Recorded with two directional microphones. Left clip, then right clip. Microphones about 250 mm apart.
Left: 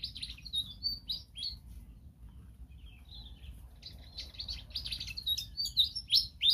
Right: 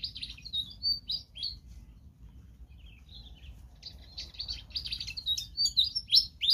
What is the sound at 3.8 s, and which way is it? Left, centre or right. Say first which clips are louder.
Bird: right 3 dB; centre.